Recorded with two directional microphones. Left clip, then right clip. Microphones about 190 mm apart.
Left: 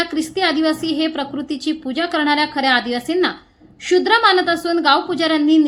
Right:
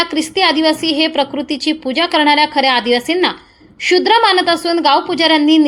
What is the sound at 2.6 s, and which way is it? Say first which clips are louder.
Speech: right 3 dB; 45° left (ahead or behind).